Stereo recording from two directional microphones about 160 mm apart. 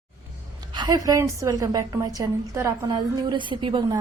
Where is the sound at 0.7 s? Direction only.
25° right (ahead or behind).